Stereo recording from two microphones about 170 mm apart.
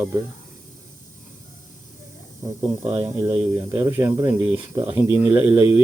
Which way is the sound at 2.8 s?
30° right (ahead or behind).